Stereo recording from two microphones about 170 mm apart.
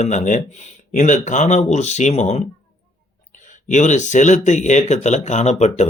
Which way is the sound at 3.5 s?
45° left (ahead or behind).